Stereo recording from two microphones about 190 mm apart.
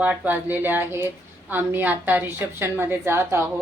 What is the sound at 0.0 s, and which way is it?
A woman's voice, 10° right (ahead or behind).